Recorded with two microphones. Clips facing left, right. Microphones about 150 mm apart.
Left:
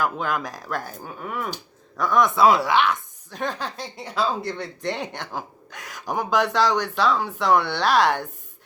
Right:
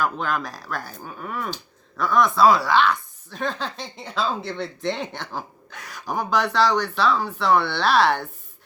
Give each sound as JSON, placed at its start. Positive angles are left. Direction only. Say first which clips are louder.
{"t": 0.0, "sound": "speech", "louder": "even", "side_deg": 15}